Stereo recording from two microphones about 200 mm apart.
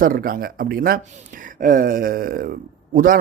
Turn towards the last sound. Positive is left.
turn(degrees=-45)  # may be behind; listen again after turning